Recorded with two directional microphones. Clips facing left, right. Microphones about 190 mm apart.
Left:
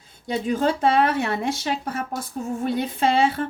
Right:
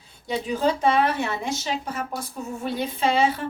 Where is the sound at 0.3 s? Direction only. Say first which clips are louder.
Left 1 dB; 50° left (ahead or behind).